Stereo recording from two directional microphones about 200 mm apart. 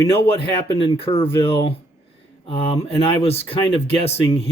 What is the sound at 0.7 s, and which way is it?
Speech, 25° left (ahead or behind).